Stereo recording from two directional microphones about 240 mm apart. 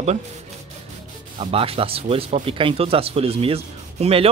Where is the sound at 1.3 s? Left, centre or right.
Right.